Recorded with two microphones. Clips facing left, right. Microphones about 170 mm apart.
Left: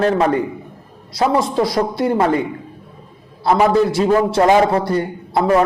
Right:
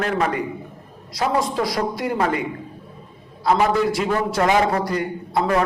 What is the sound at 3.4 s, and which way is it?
A man's voice, 30° left (ahead or behind).